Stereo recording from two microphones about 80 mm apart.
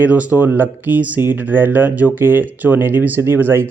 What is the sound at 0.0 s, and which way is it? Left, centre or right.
Speech, centre.